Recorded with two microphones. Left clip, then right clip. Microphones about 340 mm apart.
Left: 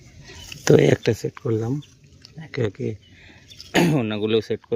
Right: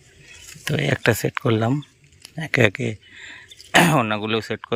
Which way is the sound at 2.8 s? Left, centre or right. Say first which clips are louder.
Right 2 dB; centre.